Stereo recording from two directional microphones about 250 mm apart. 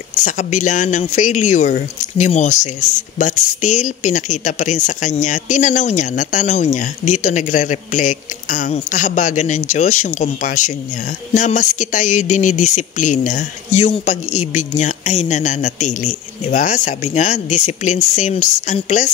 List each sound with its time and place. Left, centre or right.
0.2 s speech: left